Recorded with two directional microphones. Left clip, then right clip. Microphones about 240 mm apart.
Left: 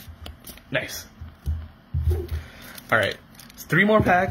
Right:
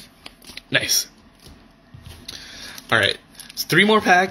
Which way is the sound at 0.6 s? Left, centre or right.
Right.